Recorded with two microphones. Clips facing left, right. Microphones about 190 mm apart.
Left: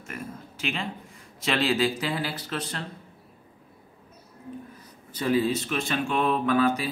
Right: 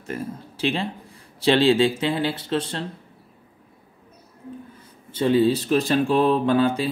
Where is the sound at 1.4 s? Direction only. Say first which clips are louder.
Right 7 dB; 30° right (ahead or behind).